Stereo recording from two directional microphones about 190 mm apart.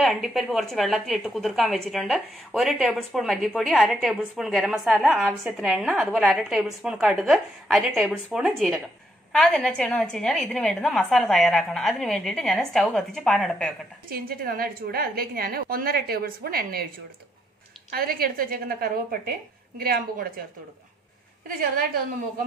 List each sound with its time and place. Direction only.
0.0 s speech: centre (ahead or behind)
14.0 s a woman's voice: 50° right (ahead or behind)
17.9 s a woman's voice: 50° right (ahead or behind)
21.5 s a woman's voice: 50° right (ahead or behind)